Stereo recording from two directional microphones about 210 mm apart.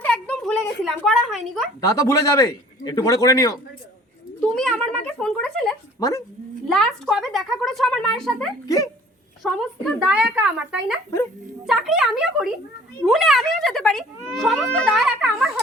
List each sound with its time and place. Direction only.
0.0 s a sound: 5° left (ahead or behind)
1.8 s a man's voice: 15° left (ahead or behind)
4.4 s a child's voice: centre (ahead or behind)
6.0 s a man's voice: 15° left (ahead or behind)
6.7 s speech: centre (ahead or behind)
8.6 s a man's voice: 15° left (ahead or behind)
9.4 s speech: centre (ahead or behind)